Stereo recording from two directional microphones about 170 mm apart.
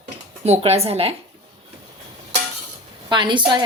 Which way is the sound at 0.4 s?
40° right (ahead or behind).